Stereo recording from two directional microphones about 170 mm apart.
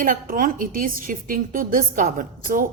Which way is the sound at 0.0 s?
55° right (ahead or behind).